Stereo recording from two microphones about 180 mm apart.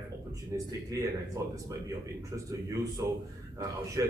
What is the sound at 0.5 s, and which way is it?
Speech, 20° right (ahead or behind).